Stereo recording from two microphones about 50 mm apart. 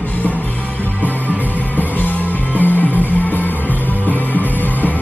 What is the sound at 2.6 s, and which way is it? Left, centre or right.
Music, left.